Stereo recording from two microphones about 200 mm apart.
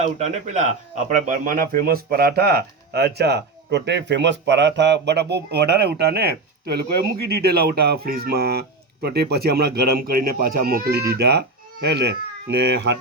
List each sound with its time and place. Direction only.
0.0 s a man's voice: 35° right (ahead or behind); by 13.0 s 60° right (ahead or behind)